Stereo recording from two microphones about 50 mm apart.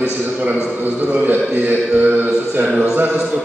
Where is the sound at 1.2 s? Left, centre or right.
Right.